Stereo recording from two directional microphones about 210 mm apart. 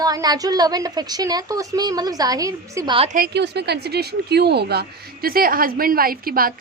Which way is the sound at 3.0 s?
40° right (ahead or behind).